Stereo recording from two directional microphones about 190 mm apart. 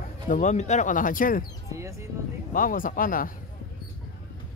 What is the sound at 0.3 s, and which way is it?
Speech, 40° left (ahead or behind).